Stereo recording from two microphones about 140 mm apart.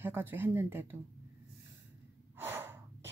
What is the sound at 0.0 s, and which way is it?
Speech, 15° right (ahead or behind).